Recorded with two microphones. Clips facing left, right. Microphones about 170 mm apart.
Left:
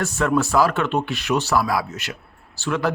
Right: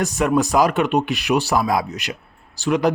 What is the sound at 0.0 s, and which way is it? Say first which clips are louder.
Speech: right 2 dB; 15° right (ahead or behind).